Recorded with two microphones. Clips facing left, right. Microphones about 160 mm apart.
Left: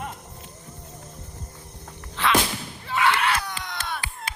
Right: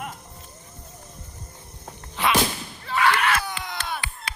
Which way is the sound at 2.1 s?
15° right (ahead or behind).